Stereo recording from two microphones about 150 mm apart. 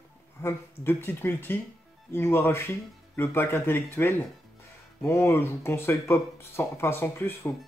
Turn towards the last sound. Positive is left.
turn(degrees=15)  # may be behind; listen again after turning